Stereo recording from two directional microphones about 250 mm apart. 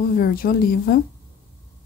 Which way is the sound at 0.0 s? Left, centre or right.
Left.